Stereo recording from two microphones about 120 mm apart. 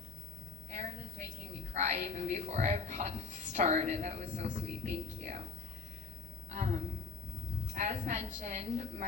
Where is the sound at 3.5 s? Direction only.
85° right.